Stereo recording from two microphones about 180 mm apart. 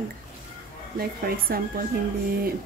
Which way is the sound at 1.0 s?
55° right (ahead or behind).